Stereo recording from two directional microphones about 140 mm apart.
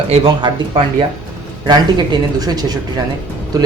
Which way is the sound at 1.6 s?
30° right (ahead or behind).